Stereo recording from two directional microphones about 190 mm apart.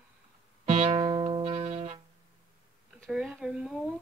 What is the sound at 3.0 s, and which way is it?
Speech, centre (ahead or behind).